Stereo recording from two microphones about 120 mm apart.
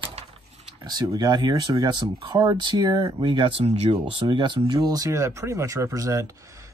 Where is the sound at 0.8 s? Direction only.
35° right (ahead or behind).